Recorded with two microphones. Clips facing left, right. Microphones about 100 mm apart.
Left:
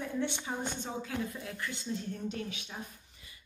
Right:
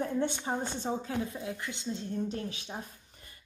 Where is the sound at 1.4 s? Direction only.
20° right (ahead or behind).